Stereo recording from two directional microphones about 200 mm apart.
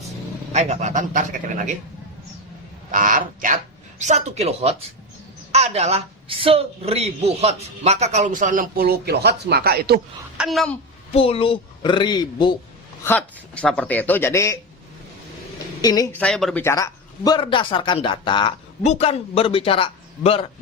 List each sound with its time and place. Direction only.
0.5 s a woman's voice: 35° right (ahead or behind)
2.9 s a woman's voice: 40° right (ahead or behind)
10.3 s a woman's voice: centre (ahead or behind)
11.1 s speech: 25° left (ahead or behind)
13.1 s a man's voice: 5° left (ahead or behind)
15.8 s speech: 20° left (ahead or behind)
16.2 s speech: centre (ahead or behind)
16.6 s speech: 15° left (ahead or behind)